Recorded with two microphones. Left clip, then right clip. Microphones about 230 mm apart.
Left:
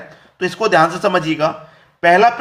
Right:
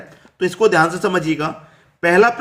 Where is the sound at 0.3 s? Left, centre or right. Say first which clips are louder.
Left 1 dB; centre.